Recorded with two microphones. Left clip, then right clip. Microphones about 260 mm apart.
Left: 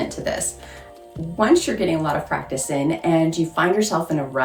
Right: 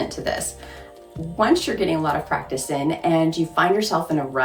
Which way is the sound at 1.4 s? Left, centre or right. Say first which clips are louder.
Left 1 dB; centre.